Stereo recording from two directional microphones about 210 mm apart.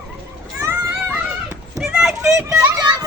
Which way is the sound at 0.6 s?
10° right (ahead or behind).